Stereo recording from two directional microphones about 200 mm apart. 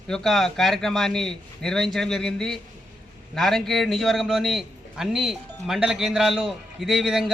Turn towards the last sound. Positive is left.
turn(degrees=0)  # may be behind; listen again after turning